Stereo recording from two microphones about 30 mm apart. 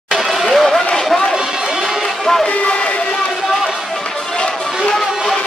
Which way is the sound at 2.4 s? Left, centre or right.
Left.